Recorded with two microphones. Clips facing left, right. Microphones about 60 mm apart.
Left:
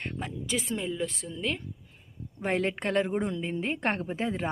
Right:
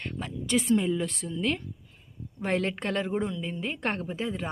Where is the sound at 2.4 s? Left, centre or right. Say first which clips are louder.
Even; centre.